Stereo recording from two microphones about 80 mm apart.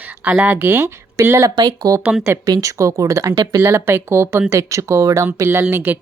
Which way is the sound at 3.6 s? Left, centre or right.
Right.